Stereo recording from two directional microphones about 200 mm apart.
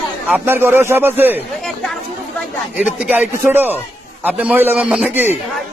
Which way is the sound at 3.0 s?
10° right (ahead or behind).